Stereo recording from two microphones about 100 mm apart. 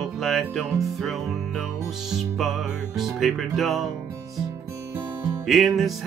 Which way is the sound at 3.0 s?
Centre (ahead or behind).